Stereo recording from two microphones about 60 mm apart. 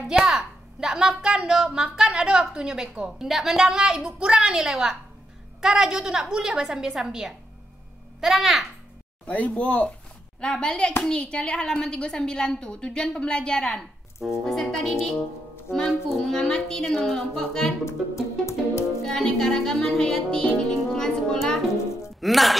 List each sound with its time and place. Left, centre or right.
0.2 s speech: centre
3.3 s speech: centre
9.2 s speech: left
10.4 s a woman's voice: centre
17.8 s music: left
19.0 s a woman's voice: centre
20.9 s music: centre
22.2 s speech: centre